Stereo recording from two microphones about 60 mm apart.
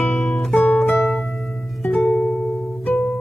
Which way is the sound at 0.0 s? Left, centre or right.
Left.